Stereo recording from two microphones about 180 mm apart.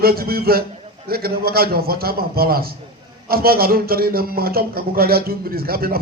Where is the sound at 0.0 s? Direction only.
55° right (ahead or behind).